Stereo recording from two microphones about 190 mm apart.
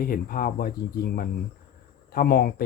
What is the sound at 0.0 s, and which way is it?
Speech, 50° left (ahead or behind).